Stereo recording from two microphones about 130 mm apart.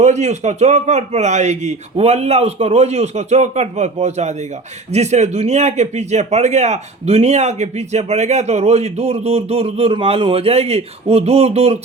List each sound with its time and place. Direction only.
0.0 s speech: 60° right (ahead or behind)